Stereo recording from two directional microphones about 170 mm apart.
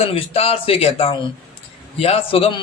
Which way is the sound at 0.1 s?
35° left (ahead or behind).